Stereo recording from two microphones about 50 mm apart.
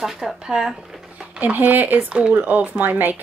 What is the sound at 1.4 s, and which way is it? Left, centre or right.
Speech, right.